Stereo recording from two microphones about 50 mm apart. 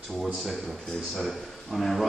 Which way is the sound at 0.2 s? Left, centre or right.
Centre.